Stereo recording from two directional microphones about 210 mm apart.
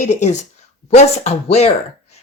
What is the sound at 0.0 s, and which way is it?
Speech, 35° left (ahead or behind).